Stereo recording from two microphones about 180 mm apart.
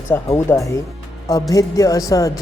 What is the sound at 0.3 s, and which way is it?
Speech, 15° left (ahead or behind).